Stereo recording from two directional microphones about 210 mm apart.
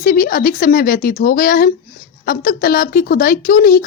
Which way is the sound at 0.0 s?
45° left (ahead or behind).